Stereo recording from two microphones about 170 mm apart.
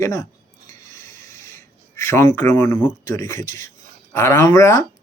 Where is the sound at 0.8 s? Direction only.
15° left (ahead or behind).